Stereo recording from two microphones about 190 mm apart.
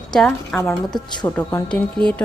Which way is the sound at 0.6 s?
20° left (ahead or behind).